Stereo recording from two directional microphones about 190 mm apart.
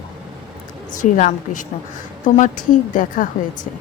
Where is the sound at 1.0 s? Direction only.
40° left (ahead or behind).